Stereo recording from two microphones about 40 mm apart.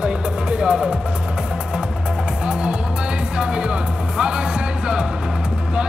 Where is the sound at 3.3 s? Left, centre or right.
Right.